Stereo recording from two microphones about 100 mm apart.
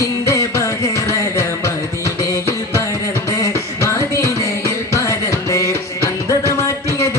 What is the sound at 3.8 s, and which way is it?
Music, 30° left (ahead or behind).